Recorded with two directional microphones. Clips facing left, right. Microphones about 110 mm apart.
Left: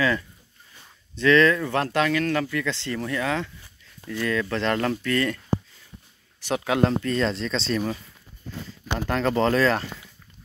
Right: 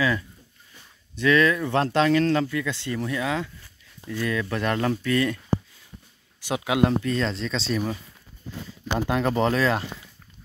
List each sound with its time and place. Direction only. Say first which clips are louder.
1.1 s speech: left 2 dB; 10° right (ahead or behind)
1.7 s speech: right 2 dB; 25° right (ahead or behind)
2.4 s speech: even; 15° right (ahead or behind)
6.4 s speech: even; 10° right (ahead or behind)
9.0 s speech: left 1 dB; 15° right (ahead or behind)